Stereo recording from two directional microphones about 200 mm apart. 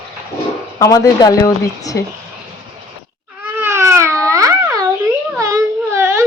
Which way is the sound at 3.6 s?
15° right (ahead or behind).